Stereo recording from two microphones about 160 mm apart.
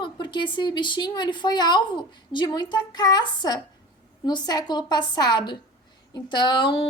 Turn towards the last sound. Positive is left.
turn(degrees=35)  # may be behind; listen again after turning